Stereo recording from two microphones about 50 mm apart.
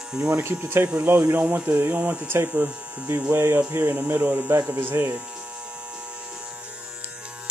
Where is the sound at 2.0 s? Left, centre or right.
Right.